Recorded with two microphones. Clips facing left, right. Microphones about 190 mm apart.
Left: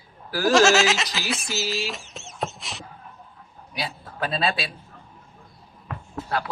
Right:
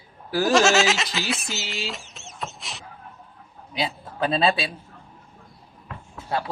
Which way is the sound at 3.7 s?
25° right (ahead or behind).